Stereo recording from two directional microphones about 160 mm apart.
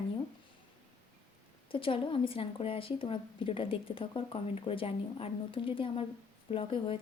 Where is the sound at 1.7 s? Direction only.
35° left (ahead or behind).